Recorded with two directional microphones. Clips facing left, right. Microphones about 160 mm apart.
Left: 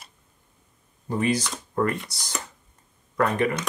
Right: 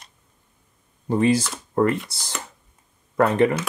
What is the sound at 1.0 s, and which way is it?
Speech, 25° right (ahead or behind).